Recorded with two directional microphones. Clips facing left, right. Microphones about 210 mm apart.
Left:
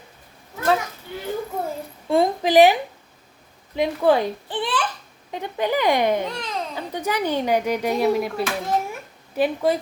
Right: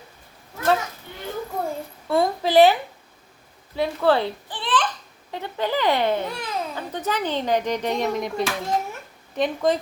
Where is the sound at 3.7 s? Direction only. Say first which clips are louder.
Left 2 dB; 15° left (ahead or behind).